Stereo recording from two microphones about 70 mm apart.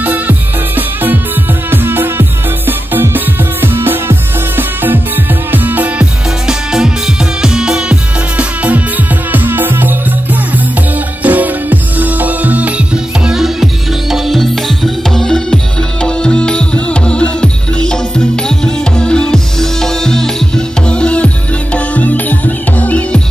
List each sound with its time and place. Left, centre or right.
0.0 s music: right
6.4 s music: centre; by 23.2 s left